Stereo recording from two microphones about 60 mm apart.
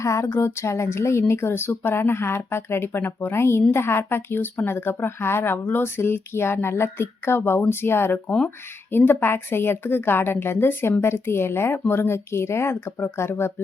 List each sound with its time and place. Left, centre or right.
0.0 s a woman's voice: left